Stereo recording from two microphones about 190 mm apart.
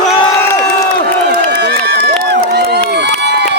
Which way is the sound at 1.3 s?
60° right (ahead or behind).